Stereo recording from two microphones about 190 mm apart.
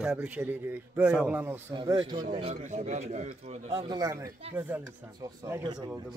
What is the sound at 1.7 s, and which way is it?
Speech, 25° right (ahead or behind).